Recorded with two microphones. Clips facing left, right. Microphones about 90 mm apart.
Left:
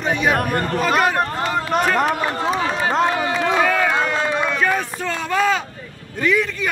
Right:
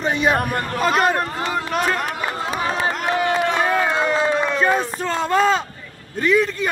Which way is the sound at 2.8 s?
30° left (ahead or behind).